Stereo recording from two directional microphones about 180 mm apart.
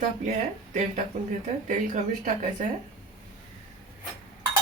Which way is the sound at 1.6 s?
45° right (ahead or behind).